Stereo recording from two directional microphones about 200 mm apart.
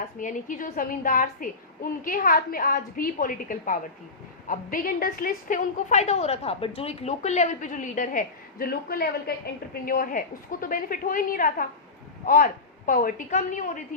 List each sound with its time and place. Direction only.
0.2 s a child's voice: 40° left (ahead or behind)